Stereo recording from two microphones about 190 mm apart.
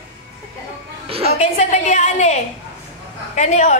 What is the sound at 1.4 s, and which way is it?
A woman's voice, 35° left (ahead or behind).